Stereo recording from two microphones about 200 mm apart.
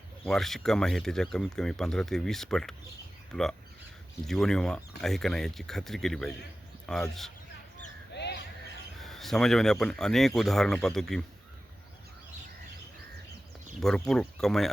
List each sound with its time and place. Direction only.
0.3 s speech: centre (ahead or behind)
4.3 s speech: centre (ahead or behind)
8.1 s crow: 60° left (ahead or behind)
9.0 s speech: centre (ahead or behind)
13.7 s speech: centre (ahead or behind)